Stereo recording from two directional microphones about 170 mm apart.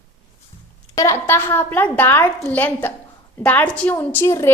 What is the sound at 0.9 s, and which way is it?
A woman's voice, 20° left (ahead or behind).